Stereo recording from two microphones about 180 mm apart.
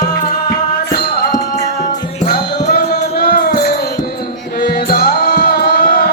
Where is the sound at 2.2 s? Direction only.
55° left (ahead or behind).